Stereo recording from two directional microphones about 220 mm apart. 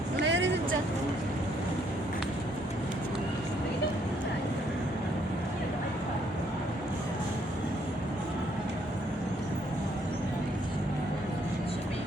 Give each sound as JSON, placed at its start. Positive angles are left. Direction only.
{"t": 0.3, "sound": "vehicle", "side_deg": -55}